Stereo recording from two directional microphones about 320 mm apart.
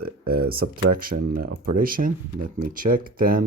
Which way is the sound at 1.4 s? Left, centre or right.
Right.